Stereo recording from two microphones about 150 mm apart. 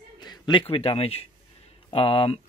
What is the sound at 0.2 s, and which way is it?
A man's voice, 30° left (ahead or behind).